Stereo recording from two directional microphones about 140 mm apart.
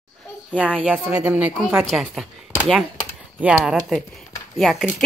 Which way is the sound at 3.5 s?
5° right (ahead or behind).